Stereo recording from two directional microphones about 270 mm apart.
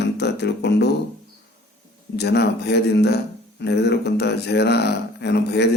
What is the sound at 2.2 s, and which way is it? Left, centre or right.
A man's voice, left.